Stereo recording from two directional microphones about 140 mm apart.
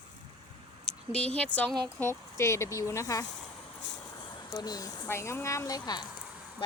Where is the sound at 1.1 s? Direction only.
10° left (ahead or behind).